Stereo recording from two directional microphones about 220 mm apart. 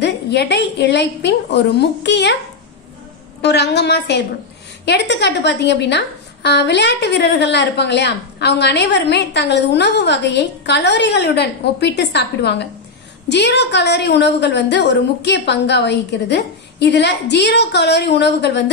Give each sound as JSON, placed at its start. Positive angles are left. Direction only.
{"t": 0.0, "sound": "a woman's voice", "side_deg": 50}
{"t": 3.4, "sound": "a woman's voice", "side_deg": 50}